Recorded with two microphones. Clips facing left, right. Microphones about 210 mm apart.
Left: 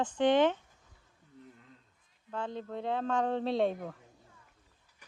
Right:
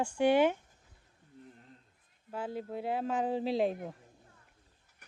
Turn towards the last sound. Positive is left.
turn(degrees=0)  # may be behind; listen again after turning